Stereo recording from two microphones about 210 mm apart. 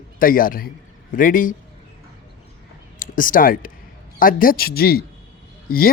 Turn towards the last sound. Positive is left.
turn(degrees=45)  # may be behind; listen again after turning